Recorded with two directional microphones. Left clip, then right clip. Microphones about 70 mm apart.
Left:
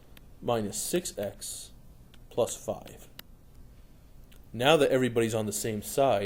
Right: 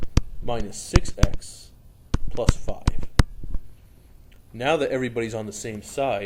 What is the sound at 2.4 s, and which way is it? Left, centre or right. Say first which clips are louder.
Speech: right 2 dB; centre.